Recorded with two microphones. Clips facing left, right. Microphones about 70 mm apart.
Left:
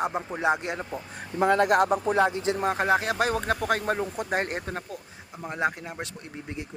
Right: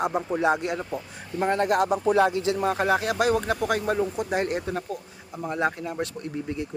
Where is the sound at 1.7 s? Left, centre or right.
Left.